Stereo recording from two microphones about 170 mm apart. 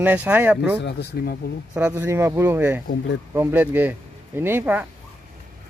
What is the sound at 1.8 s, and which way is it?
Speech, 10° right (ahead or behind).